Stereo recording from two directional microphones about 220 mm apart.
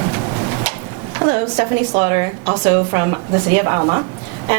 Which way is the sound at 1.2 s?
10° right (ahead or behind).